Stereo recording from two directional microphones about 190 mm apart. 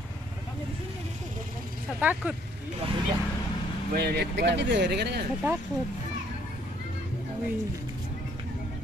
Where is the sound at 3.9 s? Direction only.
60° right (ahead or behind).